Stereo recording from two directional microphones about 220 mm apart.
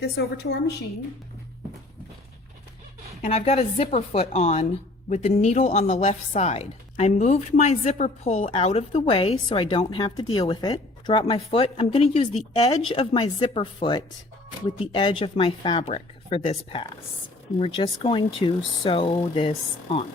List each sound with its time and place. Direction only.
3.2 s speech: 30° left (ahead or behind)